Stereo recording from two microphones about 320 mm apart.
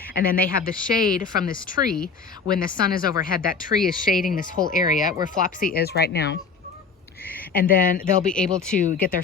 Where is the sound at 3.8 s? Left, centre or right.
Centre.